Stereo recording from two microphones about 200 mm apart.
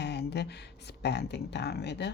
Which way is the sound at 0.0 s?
60° left (ahead or behind).